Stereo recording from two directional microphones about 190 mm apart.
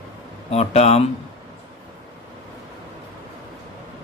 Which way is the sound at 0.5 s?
35° left (ahead or behind).